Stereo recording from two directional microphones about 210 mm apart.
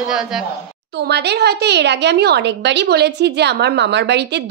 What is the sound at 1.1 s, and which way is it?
A woman's voice, 50° right (ahead or behind).